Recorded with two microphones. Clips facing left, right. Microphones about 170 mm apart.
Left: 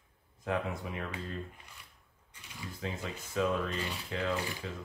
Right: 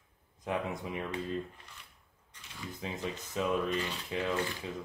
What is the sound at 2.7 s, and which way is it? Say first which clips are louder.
Rub: right 1 dB; 20° right (ahead or behind).